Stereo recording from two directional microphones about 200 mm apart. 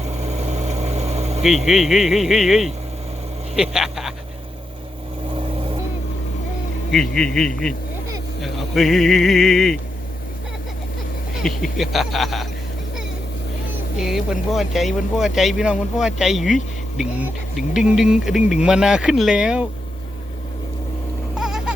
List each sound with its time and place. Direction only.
0.0 s vehicle: 35° right (ahead or behind)
1.4 s speech: centre (ahead or behind)
6.9 s speech: 5° left (ahead or behind)
11.3 s speech: centre (ahead or behind)
14.0 s speech: centre (ahead or behind)
21.3 s a sound: 5° right (ahead or behind)